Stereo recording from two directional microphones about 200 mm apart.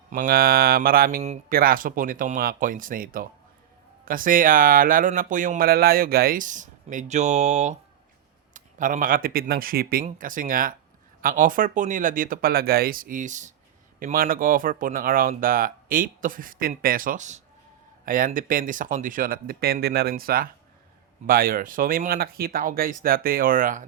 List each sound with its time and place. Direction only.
0.1 s speech: 45° right (ahead or behind)